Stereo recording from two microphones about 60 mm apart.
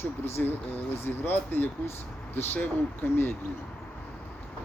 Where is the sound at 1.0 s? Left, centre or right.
Left.